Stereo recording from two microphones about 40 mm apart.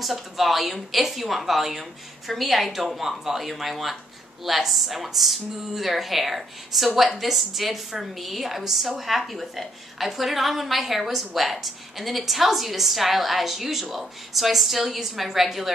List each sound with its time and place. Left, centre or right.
0.0 s speech: centre